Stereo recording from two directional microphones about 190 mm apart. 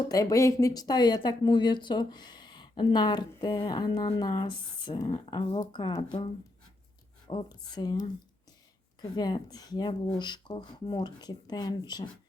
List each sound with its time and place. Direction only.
0.1 s speech: 20° left (ahead or behind)